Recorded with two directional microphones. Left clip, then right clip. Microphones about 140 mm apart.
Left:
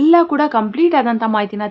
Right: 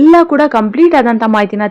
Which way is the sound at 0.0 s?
30° right (ahead or behind).